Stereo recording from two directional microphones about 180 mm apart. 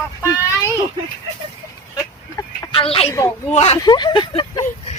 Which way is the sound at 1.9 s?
20° left (ahead or behind).